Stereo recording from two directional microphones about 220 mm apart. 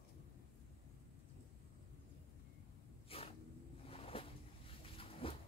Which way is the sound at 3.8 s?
25° left (ahead or behind).